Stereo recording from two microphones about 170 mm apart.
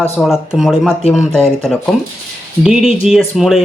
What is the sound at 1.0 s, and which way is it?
Speech, 40° left (ahead or behind).